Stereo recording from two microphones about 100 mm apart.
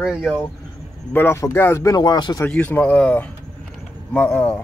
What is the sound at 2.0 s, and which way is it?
Speech, 45° left (ahead or behind).